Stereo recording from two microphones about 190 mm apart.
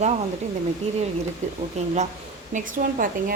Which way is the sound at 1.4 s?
35° right (ahead or behind).